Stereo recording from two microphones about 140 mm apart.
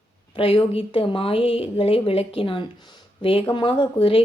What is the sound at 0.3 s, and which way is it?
A woman's voice, 40° left (ahead or behind).